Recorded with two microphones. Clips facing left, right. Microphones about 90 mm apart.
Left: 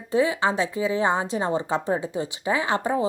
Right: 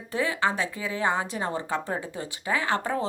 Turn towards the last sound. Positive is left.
turn(degrees=15)  # may be behind; listen again after turning